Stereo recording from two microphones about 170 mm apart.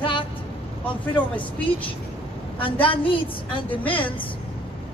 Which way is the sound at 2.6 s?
30° left (ahead or behind).